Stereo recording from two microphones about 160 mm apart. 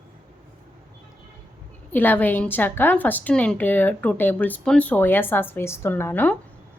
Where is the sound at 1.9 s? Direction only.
10° left (ahead or behind).